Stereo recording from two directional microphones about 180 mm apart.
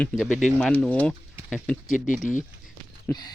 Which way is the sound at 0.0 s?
Centre (ahead or behind).